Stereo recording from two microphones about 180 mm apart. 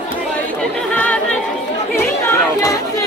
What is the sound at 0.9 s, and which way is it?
Chatter, 5° left (ahead or behind).